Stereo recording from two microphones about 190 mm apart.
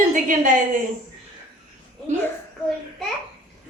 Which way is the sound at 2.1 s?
40° right (ahead or behind).